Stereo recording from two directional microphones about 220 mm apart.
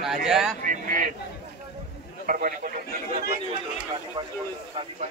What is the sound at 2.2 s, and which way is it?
Speech, 40° right (ahead or behind).